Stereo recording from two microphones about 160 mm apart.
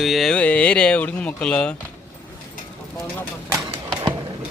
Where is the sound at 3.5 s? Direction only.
25° right (ahead or behind).